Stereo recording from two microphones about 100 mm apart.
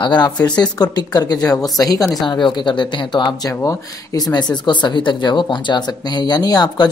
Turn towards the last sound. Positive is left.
turn(degrees=40)  # may be behind; listen again after turning